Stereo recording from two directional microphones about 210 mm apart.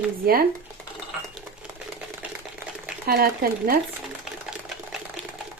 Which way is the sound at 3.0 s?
45° right (ahead or behind).